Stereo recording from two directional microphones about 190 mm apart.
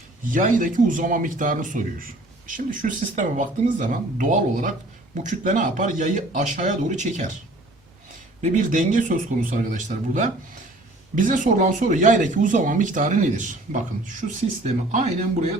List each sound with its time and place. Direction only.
0.3 s a man's voice: 45° right (ahead or behind)
8.4 s a man's voice: 40° right (ahead or behind)